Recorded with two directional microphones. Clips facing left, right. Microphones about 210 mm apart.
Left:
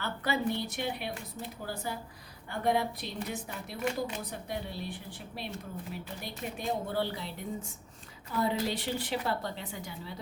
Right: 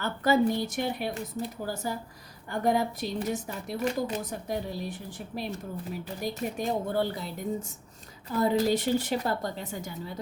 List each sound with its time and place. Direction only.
0.0 s a woman's voice: 45° right (ahead or behind)